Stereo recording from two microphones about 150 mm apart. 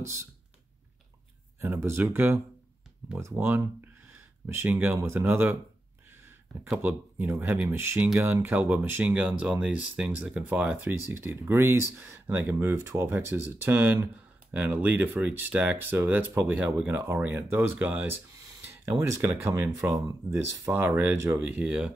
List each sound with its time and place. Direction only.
0.0 s speech: 20° right (ahead or behind)
1.6 s speech: 15° right (ahead or behind)